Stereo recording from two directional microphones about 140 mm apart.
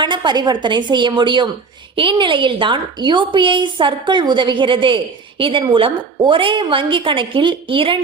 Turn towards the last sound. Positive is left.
turn(degrees=-40)  # may be behind; listen again after turning